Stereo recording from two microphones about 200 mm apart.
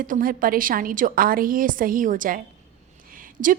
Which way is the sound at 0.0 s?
45° right (ahead or behind).